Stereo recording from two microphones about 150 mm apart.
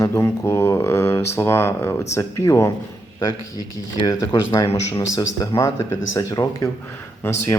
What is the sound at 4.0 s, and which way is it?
Speech, 25° left (ahead or behind).